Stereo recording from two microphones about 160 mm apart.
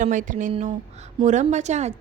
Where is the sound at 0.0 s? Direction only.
50° right (ahead or behind).